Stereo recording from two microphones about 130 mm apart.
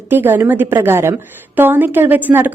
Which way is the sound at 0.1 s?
15° right (ahead or behind).